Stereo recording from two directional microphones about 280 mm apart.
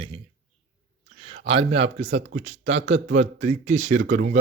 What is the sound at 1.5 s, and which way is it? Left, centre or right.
Speech, centre.